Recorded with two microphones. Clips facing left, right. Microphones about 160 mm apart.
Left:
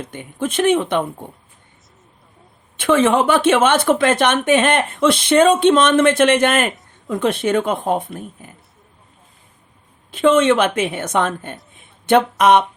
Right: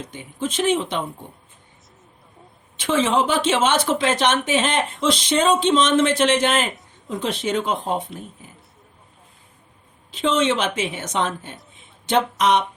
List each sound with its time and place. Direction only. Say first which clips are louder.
0.0 s speech: left 3 dB; 55° left (ahead or behind)
2.7 s speech: left 5 dB; 55° left (ahead or behind)
10.1 s speech: left 7 dB; 55° left (ahead or behind)